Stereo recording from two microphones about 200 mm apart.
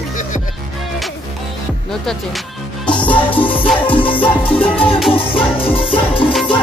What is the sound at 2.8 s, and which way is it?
Music, 5° left (ahead or behind).